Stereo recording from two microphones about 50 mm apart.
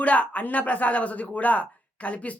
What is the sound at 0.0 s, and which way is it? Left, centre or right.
Speech, left.